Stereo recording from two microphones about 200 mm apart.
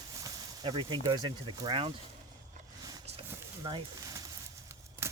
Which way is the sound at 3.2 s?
20° right (ahead or behind).